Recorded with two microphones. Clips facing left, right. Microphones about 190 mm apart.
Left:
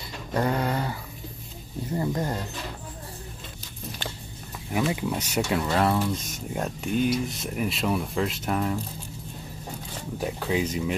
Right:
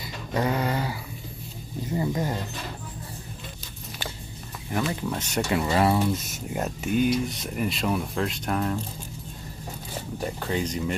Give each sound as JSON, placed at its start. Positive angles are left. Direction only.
{"t": 0.3, "sound": "a sound", "side_deg": -5}
{"t": 4.6, "sound": "speech", "side_deg": 10}
{"t": 10.2, "sound": "speech", "side_deg": 5}